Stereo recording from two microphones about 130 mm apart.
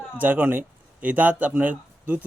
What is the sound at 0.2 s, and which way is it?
Speech, 10° right (ahead or behind).